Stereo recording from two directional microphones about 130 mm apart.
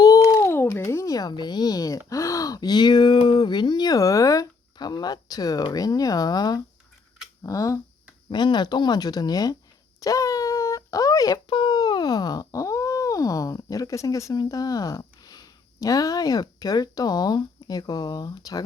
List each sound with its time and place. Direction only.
0.0 s a sound: 25° left (ahead or behind)
7.4 s speech: 25° left (ahead or behind)
8.3 s speech: 35° left (ahead or behind)